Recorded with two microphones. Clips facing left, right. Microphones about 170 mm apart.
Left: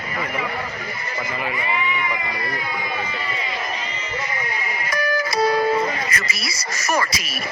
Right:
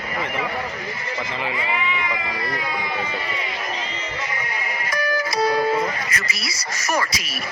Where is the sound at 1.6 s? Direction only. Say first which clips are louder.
Left 1 dB; 90° right.